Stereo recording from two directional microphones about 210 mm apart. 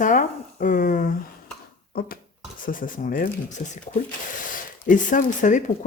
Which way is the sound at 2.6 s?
40° left (ahead or behind).